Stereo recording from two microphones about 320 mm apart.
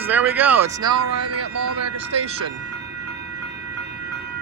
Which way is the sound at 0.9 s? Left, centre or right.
Right.